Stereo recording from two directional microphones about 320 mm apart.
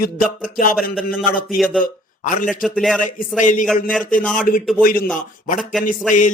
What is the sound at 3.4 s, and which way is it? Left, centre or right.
Speech, left.